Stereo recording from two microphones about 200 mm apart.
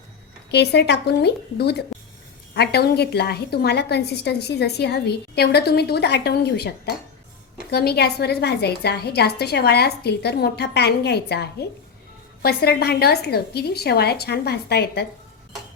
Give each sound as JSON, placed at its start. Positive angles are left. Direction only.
{"t": 0.5, "sound": "a woman's voice", "side_deg": 55}